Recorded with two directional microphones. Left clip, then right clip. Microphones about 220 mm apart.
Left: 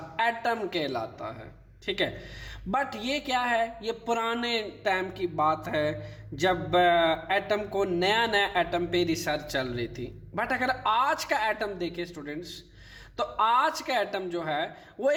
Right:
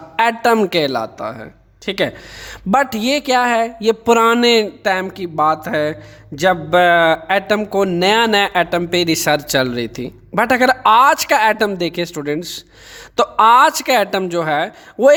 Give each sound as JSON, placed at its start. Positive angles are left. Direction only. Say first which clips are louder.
{"t": 0.2, "sound": "speech", "louder": "right 13 dB", "side_deg": -50}